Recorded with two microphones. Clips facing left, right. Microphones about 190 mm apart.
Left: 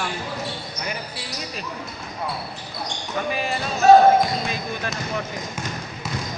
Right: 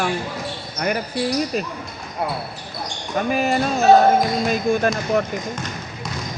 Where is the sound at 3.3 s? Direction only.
45° right (ahead or behind).